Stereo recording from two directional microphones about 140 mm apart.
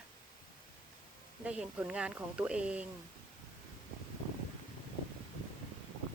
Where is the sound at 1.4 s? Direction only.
10° right (ahead or behind).